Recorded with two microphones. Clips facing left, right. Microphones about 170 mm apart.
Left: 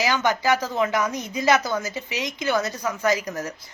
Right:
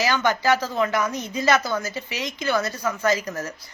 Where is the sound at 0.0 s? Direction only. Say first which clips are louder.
Even; 15° left (ahead or behind).